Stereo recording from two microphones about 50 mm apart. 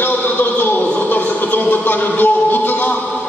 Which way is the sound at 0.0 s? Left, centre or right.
Left.